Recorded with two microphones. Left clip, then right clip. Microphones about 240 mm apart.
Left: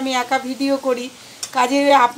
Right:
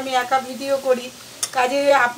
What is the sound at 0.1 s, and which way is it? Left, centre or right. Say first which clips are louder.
A woman's voice: right 1 dB; left.